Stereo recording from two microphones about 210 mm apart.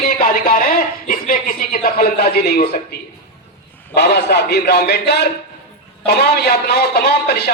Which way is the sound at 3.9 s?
50° left (ahead or behind).